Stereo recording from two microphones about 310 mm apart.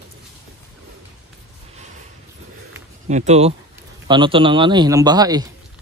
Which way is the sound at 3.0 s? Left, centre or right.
Right.